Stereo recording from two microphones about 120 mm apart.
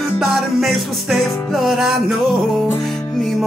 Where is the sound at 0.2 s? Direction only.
Centre (ahead or behind).